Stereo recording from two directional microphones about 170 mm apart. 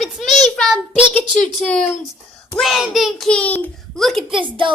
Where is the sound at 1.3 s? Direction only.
5° left (ahead or behind).